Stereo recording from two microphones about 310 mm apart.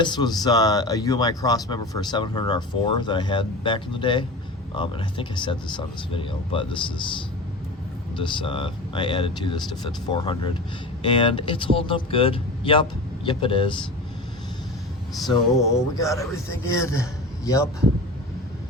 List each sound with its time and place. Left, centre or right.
0.0 s speech: centre
8.2 s speech: centre
15.7 s speech: centre